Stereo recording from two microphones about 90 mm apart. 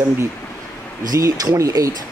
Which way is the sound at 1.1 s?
40° right (ahead or behind).